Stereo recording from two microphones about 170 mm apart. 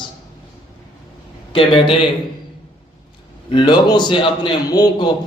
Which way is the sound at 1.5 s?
30° left (ahead or behind).